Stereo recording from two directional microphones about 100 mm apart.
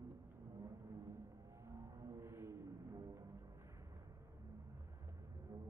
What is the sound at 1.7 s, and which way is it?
Music, 25° right (ahead or behind).